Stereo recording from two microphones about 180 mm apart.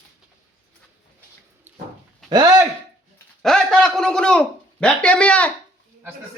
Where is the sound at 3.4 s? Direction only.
Centre (ahead or behind).